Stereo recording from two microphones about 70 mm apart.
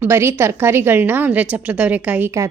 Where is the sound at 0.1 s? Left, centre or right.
Right.